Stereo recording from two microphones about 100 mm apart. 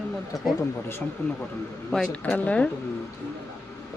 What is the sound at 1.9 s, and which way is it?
Speech, 5° left (ahead or behind).